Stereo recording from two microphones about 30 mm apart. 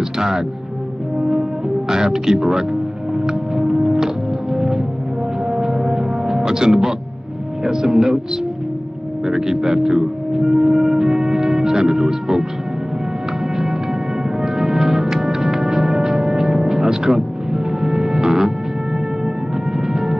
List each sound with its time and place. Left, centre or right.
0.2 s speech: centre
1.1 s french horn: right
1.9 s speech: centre
3.2 s music: centre
7.6 s speech: centre
9.2 s speech: centre
14.4 s music: centre
19.8 s music: centre